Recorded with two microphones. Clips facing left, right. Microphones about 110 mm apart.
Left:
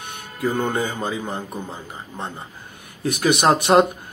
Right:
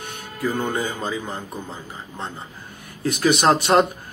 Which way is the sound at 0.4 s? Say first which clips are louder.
Left 2 dB; 25° left (ahead or behind).